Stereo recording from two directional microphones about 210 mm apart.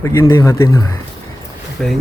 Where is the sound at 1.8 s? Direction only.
5° left (ahead or behind).